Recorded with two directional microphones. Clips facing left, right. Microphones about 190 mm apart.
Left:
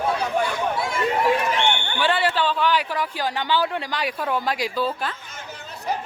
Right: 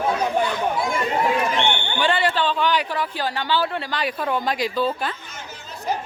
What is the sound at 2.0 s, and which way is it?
Speech, 5° left (ahead or behind).